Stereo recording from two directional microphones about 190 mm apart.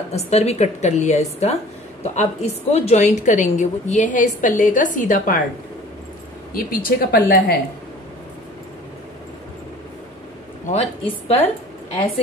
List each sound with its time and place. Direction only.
0.1 s a woman's voice: 35° left (ahead or behind)
6.5 s speech: 50° left (ahead or behind)
10.7 s a woman's voice: 35° left (ahead or behind)